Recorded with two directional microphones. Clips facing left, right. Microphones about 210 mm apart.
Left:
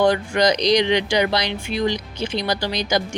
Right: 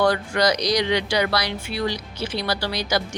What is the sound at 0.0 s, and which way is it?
Speech, 15° left (ahead or behind).